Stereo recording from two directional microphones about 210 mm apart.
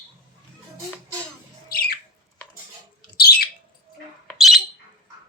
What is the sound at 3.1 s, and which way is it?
Bird, 45° left (ahead or behind).